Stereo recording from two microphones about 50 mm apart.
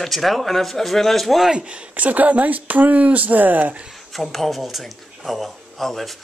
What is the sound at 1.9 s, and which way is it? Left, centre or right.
Speech, right.